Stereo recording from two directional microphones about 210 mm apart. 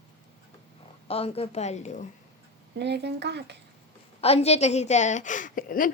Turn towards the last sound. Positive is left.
turn(degrees=40)  # may be behind; listen again after turning